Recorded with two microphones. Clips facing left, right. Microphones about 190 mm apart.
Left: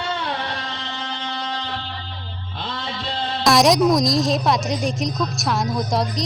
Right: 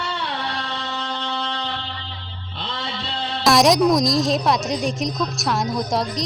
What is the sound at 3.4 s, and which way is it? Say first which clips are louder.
A woman's voice: even; centre (ahead or behind).